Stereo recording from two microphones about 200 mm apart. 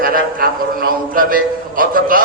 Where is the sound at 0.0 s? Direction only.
45° right (ahead or behind).